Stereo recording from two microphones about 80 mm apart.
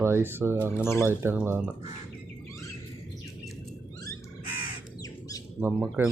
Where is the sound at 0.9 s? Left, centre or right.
Left.